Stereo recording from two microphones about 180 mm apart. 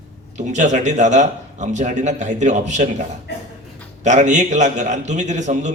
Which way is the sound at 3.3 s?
70° left (ahead or behind).